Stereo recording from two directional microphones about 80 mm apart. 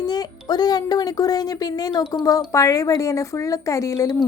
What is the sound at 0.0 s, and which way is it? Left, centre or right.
A woman's voice, left.